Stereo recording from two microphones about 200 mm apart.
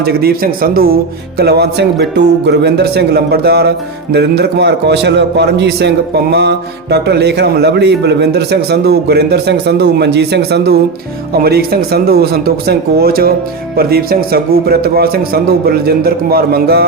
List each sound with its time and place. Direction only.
0.0 s a man's voice: 50° right (ahead or behind)